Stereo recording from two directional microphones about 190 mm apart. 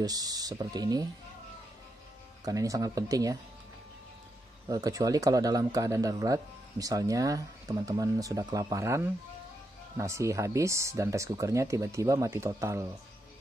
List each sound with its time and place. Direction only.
0.0 s speech: 20° right (ahead or behind)
2.4 s speech: 15° right (ahead or behind)
4.6 s speech: 20° right (ahead or behind)